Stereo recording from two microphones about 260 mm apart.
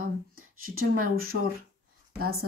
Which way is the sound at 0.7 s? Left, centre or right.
Right.